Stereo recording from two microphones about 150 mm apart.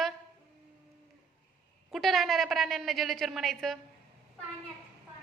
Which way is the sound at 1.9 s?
Centre (ahead or behind).